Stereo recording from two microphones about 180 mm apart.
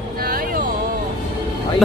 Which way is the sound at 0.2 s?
55° right (ahead or behind).